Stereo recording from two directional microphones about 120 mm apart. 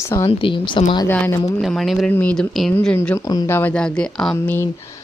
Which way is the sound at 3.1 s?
30° left (ahead or behind).